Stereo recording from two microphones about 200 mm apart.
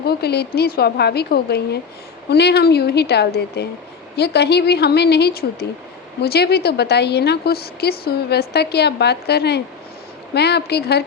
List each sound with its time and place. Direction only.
0.0 s a woman's voice: 50° left (ahead or behind)